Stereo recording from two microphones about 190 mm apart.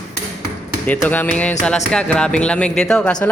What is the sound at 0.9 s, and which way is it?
Speech, 10° left (ahead or behind).